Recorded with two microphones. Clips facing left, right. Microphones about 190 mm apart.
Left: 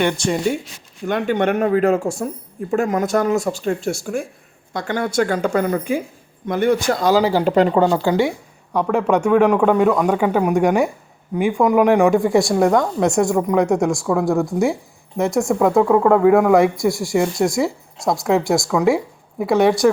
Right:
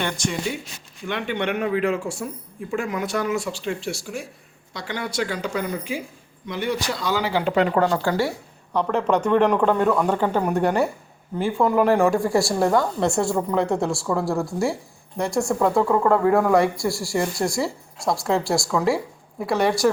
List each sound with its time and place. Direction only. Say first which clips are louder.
0.2 s speech: left 6 dB; 30° left (ahead or behind)
1.0 s speech: left 7 dB; 45° left (ahead or behind)
7.7 s speech: left 5 dB; 25° left (ahead or behind)